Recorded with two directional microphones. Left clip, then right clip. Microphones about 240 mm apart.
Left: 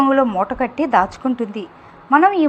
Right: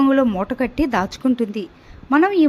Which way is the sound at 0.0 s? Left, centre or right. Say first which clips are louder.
Left 2 dB; right.